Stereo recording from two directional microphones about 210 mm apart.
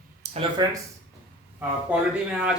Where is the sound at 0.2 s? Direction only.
25° right (ahead or behind).